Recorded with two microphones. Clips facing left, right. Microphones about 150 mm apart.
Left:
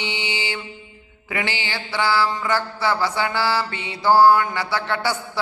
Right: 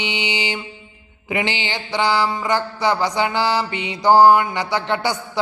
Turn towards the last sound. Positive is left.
turn(degrees=-20)  # may be behind; listen again after turning